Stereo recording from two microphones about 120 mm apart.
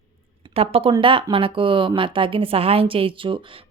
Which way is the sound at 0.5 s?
50° right (ahead or behind).